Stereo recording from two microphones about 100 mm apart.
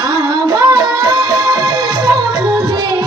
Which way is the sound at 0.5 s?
35° right (ahead or behind).